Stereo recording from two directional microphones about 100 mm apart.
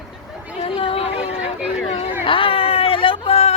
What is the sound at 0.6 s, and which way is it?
Speech, 70° left (ahead or behind).